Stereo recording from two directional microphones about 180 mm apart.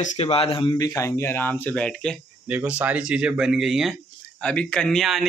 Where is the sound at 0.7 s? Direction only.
15° left (ahead or behind).